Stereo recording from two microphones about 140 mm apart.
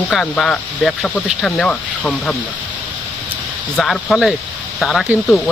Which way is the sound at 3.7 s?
5° left (ahead or behind).